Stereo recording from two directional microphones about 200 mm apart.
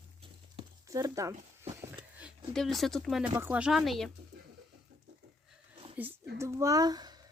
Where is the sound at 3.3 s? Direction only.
10° right (ahead or behind).